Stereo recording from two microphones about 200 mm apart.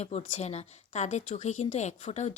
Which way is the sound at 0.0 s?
30° left (ahead or behind).